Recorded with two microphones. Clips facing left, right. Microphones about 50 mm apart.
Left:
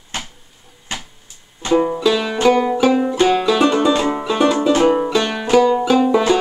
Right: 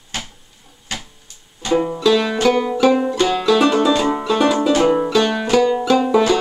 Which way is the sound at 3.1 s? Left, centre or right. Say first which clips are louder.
Left 2 dB; centre.